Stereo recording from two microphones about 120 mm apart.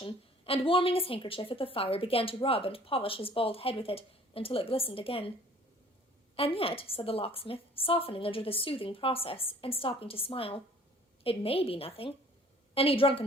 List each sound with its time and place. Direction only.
0.0 s a woman's voice: 50° left (ahead or behind)
6.3 s a woman's voice: 50° left (ahead or behind)